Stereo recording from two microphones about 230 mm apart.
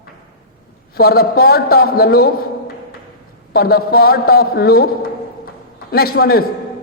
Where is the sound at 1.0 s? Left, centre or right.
Left.